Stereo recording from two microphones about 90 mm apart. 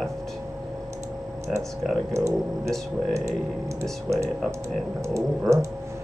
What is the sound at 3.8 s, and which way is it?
Speech, 35° right (ahead or behind).